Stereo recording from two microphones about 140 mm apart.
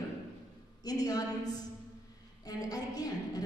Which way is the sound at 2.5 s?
25° left (ahead or behind).